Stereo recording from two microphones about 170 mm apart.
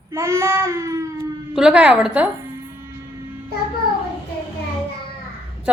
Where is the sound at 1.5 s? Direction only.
5° right (ahead or behind).